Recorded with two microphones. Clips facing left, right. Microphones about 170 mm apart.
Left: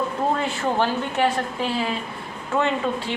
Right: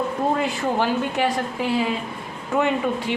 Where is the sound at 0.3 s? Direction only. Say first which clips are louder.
Right 1 dB; 15° right (ahead or behind).